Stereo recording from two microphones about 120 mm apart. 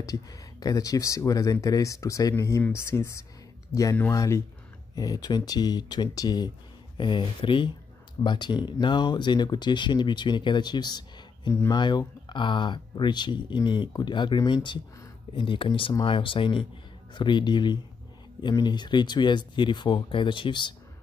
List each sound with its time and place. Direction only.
0.0 s speech: 30° left (ahead or behind)